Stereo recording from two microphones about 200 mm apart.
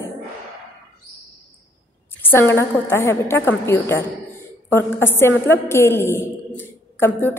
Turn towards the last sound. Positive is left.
turn(degrees=10)  # may be behind; listen again after turning